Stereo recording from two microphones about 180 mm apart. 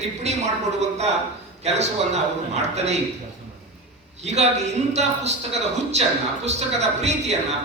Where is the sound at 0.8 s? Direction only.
40° right (ahead or behind).